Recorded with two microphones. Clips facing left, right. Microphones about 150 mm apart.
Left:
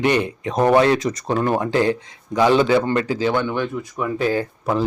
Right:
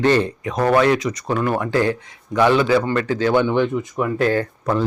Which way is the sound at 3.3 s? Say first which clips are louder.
Right 5 dB; 15° right (ahead or behind).